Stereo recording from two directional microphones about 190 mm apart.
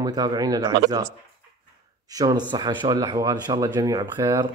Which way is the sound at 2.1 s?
20° right (ahead or behind).